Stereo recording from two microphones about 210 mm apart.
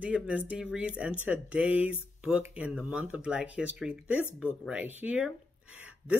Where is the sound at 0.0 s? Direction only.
5° right (ahead or behind).